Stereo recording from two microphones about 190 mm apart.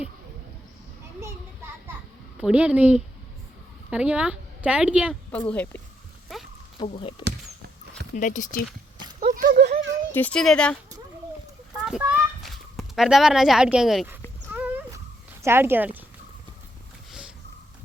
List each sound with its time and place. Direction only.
2.4 s a woman's voice: 5° right (ahead or behind)
5.3 s speech: 5° left (ahead or behind)
6.7 s speech: 30° left (ahead or behind)
8.1 s speech: 40° left (ahead or behind)
9.2 s speech: 50° right (ahead or behind)
10.1 s speech: 10° left (ahead or behind)
11.9 s a child's voice: 5° right (ahead or behind)
14.5 s a sound: 10° right (ahead or behind)
15.4 s speech: 10° right (ahead or behind)